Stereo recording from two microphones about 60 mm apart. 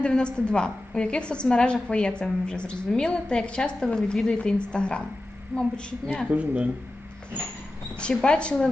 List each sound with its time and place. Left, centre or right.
0.0 s a woman's voice: centre
5.5 s a woman's voice: right
6.2 s speech: right
8.2 s a woman's voice: centre